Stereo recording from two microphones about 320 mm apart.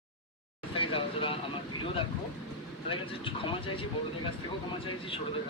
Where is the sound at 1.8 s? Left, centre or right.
Centre.